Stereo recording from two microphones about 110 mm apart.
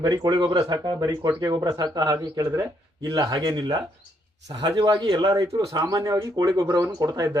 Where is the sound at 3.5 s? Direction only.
45° right (ahead or behind).